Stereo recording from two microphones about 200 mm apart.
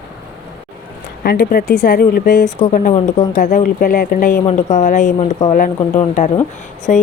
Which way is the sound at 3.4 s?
40° left (ahead or behind).